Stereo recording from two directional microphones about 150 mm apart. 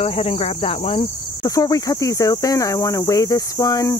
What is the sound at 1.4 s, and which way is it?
Speech, 25° left (ahead or behind).